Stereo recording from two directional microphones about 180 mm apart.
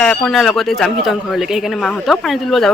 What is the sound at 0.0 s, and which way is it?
Speech, 5° left (ahead or behind).